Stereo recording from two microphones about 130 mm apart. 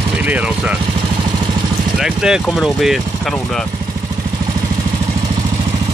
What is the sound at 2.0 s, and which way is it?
Speech, 5° right (ahead or behind).